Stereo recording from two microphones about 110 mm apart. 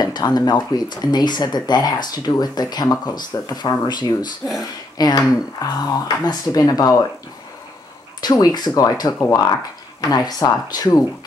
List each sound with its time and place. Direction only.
0.0 s speech: 35° left (ahead or behind)
8.2 s speech: 40° left (ahead or behind)